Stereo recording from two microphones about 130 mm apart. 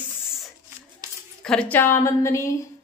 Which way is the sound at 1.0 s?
25° right (ahead or behind).